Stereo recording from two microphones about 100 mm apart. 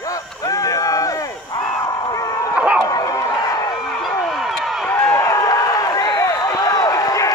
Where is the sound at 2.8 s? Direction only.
40° left (ahead or behind).